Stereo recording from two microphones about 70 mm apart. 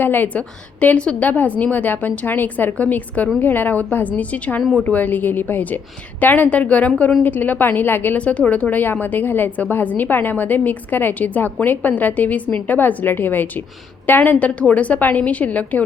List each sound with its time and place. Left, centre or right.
0.0 s a woman's voice: left
8.2 s a woman's voice: centre